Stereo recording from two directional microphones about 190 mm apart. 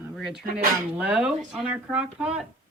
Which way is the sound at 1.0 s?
5° right (ahead or behind).